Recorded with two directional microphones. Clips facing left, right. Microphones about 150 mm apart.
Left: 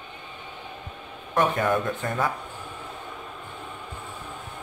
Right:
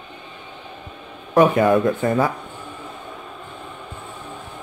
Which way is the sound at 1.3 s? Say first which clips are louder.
Right 8 dB; 5° right (ahead or behind).